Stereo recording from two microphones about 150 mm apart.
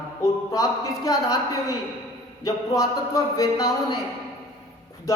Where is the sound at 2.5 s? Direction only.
20° left (ahead or behind).